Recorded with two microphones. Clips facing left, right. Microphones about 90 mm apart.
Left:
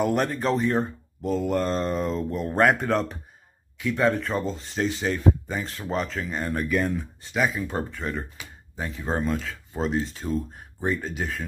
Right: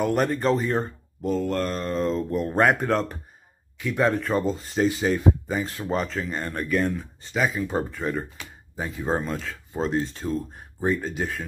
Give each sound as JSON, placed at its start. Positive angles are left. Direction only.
{"t": 0.0, "sound": "speech", "side_deg": 0}
{"t": 1.5, "sound": "a sound", "side_deg": 20}
{"t": 2.0, "sound": "speech", "side_deg": 0}